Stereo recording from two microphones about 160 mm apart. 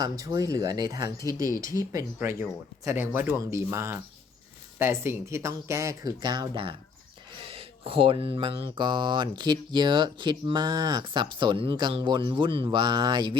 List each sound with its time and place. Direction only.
0.0 s speech: 25° right (ahead or behind)